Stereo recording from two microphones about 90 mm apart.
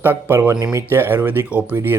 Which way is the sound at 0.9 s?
25° right (ahead or behind).